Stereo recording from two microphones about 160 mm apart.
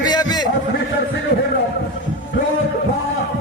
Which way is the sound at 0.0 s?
25° left (ahead or behind).